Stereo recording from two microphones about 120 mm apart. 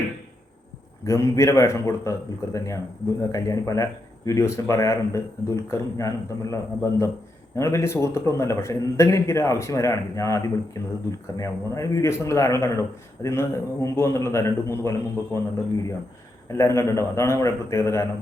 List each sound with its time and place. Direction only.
1.0 s a man's voice: 25° left (ahead or behind)
16.5 s a man's voice: 25° left (ahead or behind)